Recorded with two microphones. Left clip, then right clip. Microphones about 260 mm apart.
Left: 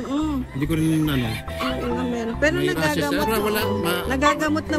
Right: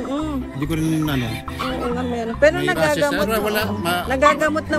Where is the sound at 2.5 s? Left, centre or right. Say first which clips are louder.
Right 3 dB; centre.